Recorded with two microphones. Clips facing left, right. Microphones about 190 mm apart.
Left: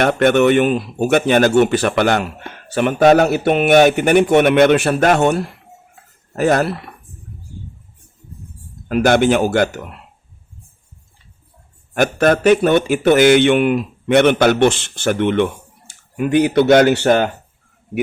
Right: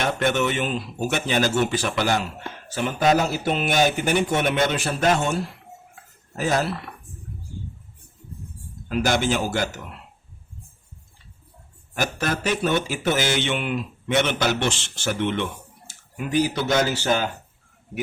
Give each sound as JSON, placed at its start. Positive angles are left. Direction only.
{"t": 0.0, "sound": "speech", "side_deg": 60}
{"t": 8.9, "sound": "speech", "side_deg": 60}
{"t": 11.9, "sound": "speech", "side_deg": 60}